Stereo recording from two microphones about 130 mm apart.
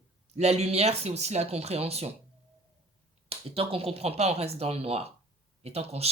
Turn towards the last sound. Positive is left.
turn(degrees=-50)  # may be behind; listen again after turning